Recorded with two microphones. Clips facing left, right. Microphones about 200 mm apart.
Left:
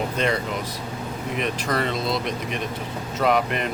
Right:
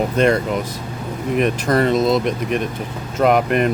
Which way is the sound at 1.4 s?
45° right (ahead or behind).